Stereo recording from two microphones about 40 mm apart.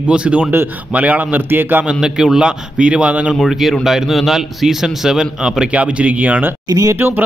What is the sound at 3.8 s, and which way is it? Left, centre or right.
A man's voice, centre.